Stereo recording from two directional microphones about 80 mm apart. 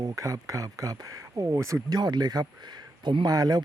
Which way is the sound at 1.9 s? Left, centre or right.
Right.